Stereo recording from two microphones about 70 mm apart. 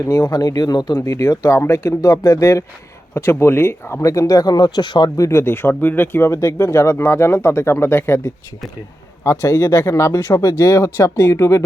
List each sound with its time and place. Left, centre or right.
0.0 s speech: left
1.0 s speech: left
3.2 s speech: left
4.1 s speech: left
5.3 s speech: left
6.2 s speech: left